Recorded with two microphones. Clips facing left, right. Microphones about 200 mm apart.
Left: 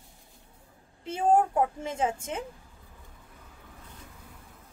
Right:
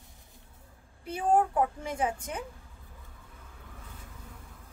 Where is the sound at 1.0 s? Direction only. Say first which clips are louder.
Left 2 dB; 25° left (ahead or behind).